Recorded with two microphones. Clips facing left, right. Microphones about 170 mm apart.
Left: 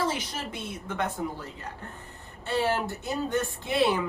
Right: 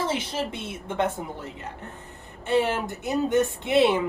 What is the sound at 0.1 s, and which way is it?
Speech, 25° right (ahead or behind).